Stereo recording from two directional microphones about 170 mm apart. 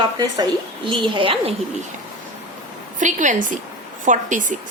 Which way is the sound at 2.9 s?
45° right (ahead or behind).